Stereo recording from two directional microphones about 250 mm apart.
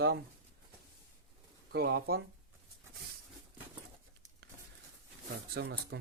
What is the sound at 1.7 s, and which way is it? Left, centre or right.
Speech, right.